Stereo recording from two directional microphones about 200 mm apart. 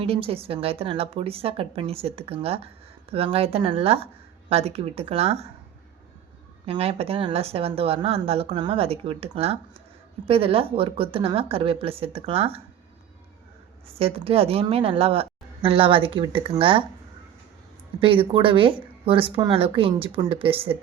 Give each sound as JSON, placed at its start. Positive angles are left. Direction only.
{"t": 0.0, "sound": "speech", "side_deg": -30}
{"t": 6.7, "sound": "speech", "side_deg": -30}
{"t": 13.8, "sound": "speech", "side_deg": -30}
{"t": 18.0, "sound": "speech", "side_deg": -25}